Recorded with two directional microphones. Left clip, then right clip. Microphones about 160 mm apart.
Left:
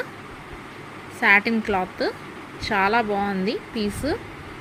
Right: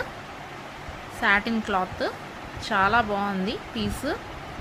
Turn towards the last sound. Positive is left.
turn(degrees=10)  # may be behind; listen again after turning